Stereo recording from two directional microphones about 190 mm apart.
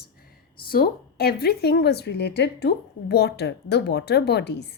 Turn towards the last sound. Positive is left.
turn(degrees=60)  # may be behind; listen again after turning